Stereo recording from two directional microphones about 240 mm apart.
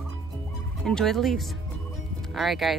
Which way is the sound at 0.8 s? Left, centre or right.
Centre.